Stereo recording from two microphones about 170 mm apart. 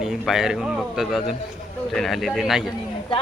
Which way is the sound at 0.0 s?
Centre (ahead or behind).